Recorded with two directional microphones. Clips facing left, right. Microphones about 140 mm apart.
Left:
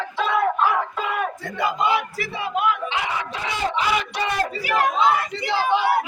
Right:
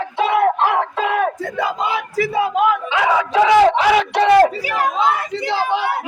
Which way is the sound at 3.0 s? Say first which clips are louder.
Right 12 dB; 90° right.